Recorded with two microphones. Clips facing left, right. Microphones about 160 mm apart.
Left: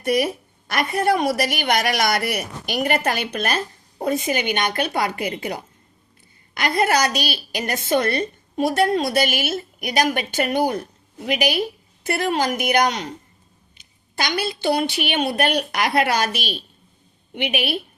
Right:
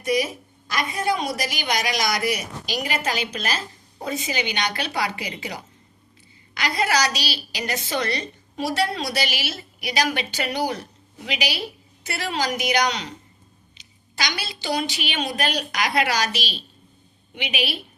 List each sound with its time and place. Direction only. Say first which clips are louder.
0.0 s a woman's voice: left 3 dB; 60° left (ahead or behind)